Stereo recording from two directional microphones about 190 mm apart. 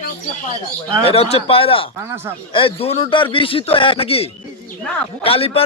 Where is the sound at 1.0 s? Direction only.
30° left (ahead or behind).